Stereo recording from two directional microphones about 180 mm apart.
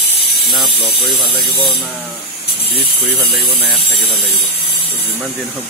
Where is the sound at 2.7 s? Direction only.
30° right (ahead or behind).